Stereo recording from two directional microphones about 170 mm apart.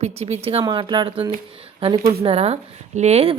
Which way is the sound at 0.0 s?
40° right (ahead or behind).